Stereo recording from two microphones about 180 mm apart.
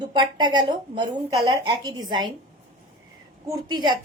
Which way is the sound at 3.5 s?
25° right (ahead or behind).